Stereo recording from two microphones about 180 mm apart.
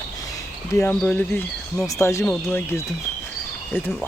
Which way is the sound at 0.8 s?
10° left (ahead or behind).